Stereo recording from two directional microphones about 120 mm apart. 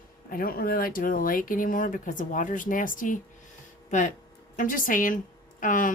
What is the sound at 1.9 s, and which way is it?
Speech, 90° left.